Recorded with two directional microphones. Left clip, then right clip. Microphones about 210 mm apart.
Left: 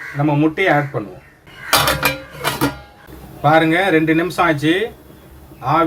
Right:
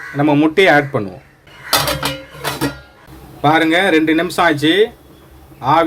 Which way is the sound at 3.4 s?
50° right (ahead or behind).